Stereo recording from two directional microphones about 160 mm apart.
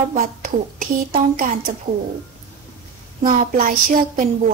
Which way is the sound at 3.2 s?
55° right (ahead or behind).